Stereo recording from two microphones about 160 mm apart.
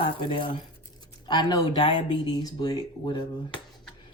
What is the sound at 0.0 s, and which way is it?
Speech, 30° left (ahead or behind).